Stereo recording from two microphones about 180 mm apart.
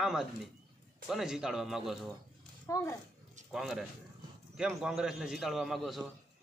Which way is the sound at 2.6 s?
15° left (ahead or behind).